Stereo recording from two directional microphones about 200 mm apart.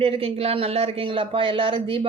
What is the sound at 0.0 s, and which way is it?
Speech, 30° right (ahead or behind).